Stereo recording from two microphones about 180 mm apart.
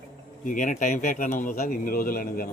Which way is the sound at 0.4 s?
45° left (ahead or behind).